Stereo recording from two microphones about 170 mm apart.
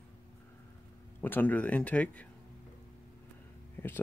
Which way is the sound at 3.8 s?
10° left (ahead or behind).